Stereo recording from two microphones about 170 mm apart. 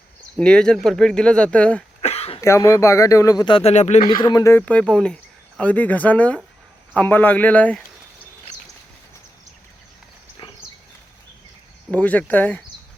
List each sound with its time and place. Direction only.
0.3 s speech: 5° left (ahead or behind)
2.0 s throat clearing: 35° left (ahead or behind)
2.4 s speech: 20° left (ahead or behind); by 4.0 s 45° left (ahead or behind)
4.1 s speech: 25° left (ahead or behind)
4.6 s speech: 5° left (ahead or behind)
10.4 s dog: 30° left (ahead or behind)
11.9 s speech: 10° left (ahead or behind)